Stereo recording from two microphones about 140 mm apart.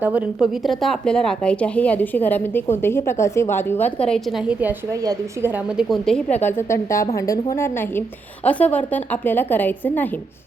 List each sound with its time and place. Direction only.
0.0 s speech: 10° right (ahead or behind)
4.9 s a woman's voice: 20° right (ahead or behind)
5.6 s a woman's voice: centre (ahead or behind)
6.3 s a woman's voice: 15° left (ahead or behind)